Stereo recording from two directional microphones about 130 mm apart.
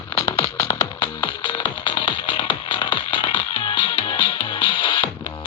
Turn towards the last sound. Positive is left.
turn(degrees=40)  # may be behind; listen again after turning